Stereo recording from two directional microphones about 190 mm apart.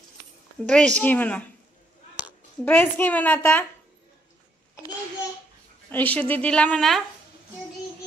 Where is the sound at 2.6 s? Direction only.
10° left (ahead or behind).